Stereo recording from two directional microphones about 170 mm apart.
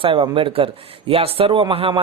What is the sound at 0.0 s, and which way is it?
A man's voice, 30° right (ahead or behind).